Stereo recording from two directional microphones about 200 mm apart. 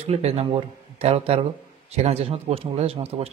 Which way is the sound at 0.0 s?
30° right (ahead or behind).